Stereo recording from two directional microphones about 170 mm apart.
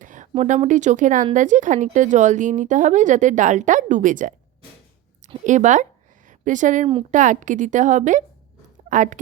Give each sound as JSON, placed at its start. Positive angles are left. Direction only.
{"t": 0.0, "sound": "speech", "side_deg": -50}
{"t": 5.5, "sound": "speech", "side_deg": -45}